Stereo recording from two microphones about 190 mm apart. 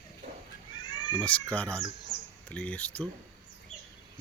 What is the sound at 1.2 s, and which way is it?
Speech, 5° left (ahead or behind).